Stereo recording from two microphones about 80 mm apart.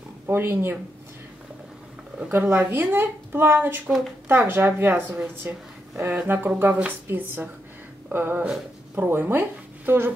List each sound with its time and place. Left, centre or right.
0.3 s speech: right
2.3 s speech: right